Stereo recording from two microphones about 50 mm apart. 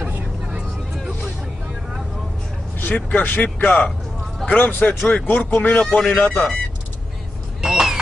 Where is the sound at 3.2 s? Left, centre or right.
Left.